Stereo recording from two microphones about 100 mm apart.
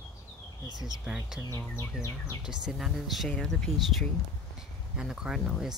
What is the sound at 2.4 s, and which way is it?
Speech, 5° right (ahead or behind).